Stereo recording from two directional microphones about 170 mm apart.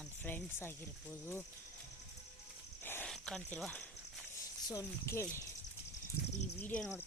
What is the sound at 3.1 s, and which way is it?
Speech, 5° left (ahead or behind).